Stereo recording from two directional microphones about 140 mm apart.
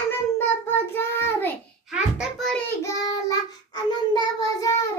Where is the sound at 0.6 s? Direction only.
15° left (ahead or behind).